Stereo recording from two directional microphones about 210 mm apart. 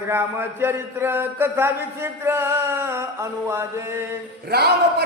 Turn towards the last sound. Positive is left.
turn(degrees=-50)  # may be behind; listen again after turning